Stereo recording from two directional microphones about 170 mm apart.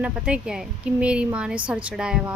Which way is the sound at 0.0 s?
5° right (ahead or behind).